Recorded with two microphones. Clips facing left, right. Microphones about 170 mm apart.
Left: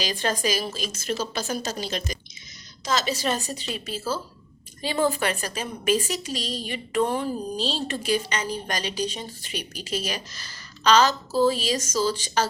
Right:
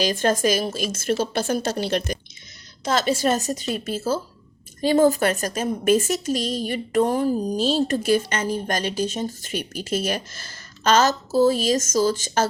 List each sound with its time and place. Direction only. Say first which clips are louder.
0.0 s a woman's voice: right 6 dB; 50° right (ahead or behind)